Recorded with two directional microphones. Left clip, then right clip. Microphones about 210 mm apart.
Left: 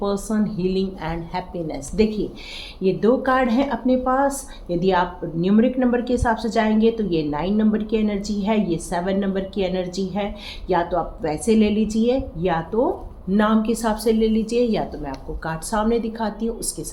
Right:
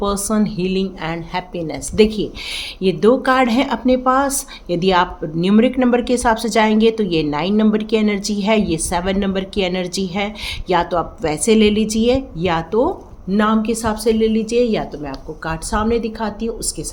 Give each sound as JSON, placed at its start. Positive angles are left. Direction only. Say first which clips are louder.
{"t": 0.0, "sound": "a woman's voice", "louder": "right 4 dB", "side_deg": -40}
{"t": 13.3, "sound": "a woman's voice", "louder": "right 3 dB", "side_deg": -25}